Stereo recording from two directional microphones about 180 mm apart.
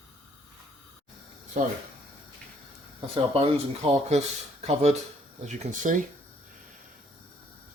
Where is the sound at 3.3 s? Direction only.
30° right (ahead or behind).